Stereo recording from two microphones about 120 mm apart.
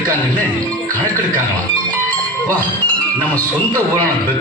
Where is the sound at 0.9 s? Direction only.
15° left (ahead or behind).